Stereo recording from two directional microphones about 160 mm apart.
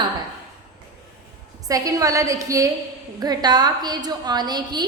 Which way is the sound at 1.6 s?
20° right (ahead or behind).